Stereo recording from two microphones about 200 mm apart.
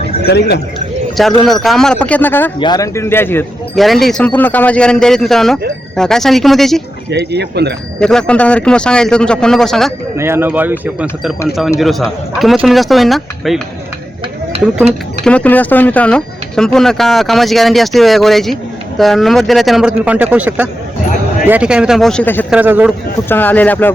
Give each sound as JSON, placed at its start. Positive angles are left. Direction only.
{"t": 0.3, "sound": "speech", "side_deg": 55}
{"t": 1.5, "sound": "speech", "side_deg": 0}
{"t": 2.6, "sound": "a man's voice", "side_deg": 20}
{"t": 3.8, "sound": "speech", "side_deg": 0}
{"t": 7.1, "sound": "speech", "side_deg": -55}
{"t": 7.9, "sound": "speech", "side_deg": 5}
{"t": 10.2, "sound": "speech", "side_deg": -10}
{"t": 15.2, "sound": "speech", "side_deg": 5}
{"t": 22.4, "sound": "speech", "side_deg": -5}
{"t": 23.3, "sound": "a man's voice", "side_deg": 10}